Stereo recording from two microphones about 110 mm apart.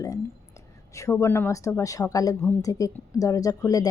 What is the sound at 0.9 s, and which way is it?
A woman's voice, 30° left (ahead or behind).